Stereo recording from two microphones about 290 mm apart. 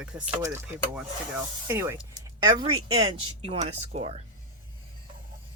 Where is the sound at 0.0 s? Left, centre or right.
Centre; by 4.2 s right.